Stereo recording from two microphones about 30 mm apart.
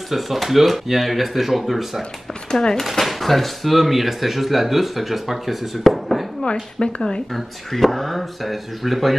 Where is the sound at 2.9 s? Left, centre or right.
Centre.